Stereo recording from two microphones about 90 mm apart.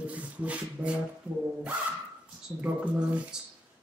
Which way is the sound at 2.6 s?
15° right (ahead or behind).